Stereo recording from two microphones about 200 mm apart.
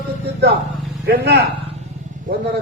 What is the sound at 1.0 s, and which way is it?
Speech, 50° right (ahead or behind).